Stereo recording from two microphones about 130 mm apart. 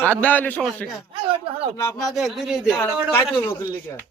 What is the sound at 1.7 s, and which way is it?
Speech, 20° left (ahead or behind).